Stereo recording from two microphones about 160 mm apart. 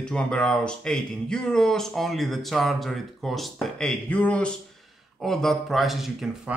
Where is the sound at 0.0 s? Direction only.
5° left (ahead or behind).